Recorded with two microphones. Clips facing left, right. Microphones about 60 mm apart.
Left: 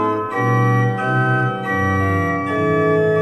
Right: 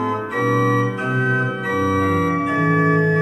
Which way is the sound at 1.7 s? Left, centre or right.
Left.